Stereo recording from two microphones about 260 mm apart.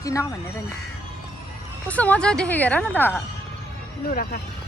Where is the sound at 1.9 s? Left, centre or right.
Centre.